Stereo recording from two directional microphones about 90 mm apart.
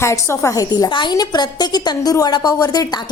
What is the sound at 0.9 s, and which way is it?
A woman's voice, 60° left (ahead or behind).